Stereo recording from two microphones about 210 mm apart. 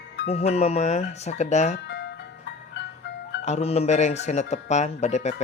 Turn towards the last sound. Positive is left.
turn(degrees=35)  # may be behind; listen again after turning